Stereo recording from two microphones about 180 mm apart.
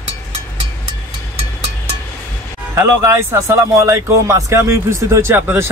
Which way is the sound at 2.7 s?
15° right (ahead or behind).